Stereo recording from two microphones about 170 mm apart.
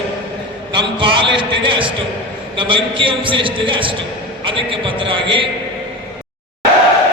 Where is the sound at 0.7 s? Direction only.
30° right (ahead or behind).